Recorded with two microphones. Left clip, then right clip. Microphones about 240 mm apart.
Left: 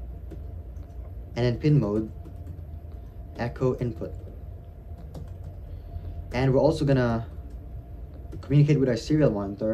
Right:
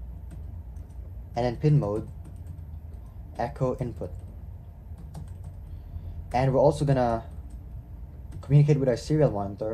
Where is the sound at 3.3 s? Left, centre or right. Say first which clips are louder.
Left 1 dB; left.